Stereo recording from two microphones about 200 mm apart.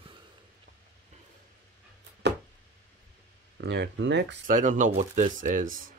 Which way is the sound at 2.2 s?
60° right (ahead or behind).